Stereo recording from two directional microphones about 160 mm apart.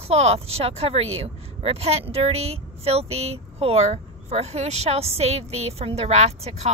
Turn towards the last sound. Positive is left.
turn(degrees=-45)  # may be behind; listen again after turning